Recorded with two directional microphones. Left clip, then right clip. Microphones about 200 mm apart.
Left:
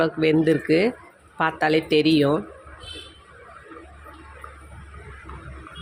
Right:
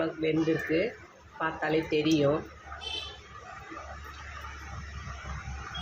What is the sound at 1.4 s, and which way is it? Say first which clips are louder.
Speech: left 8 dB; 50° left (ahead or behind).